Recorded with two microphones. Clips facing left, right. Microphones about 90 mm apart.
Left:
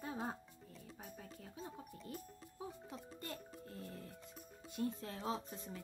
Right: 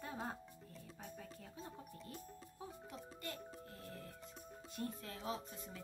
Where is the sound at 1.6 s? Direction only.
Centre (ahead or behind).